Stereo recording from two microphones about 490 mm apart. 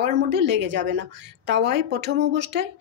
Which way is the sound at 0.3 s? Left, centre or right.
Right.